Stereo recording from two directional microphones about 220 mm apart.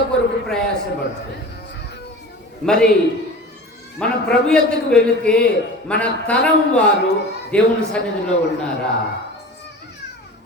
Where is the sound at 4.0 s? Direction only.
5° left (ahead or behind).